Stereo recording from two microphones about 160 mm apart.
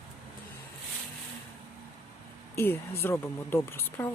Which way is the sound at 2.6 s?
15° left (ahead or behind).